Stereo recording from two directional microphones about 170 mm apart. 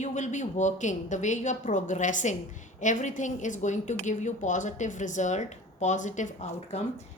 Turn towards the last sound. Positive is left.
turn(degrees=40)  # may be behind; listen again after turning